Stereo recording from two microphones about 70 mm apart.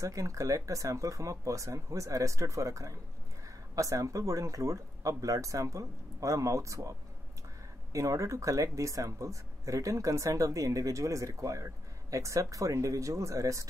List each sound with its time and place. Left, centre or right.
0.0 s speech: right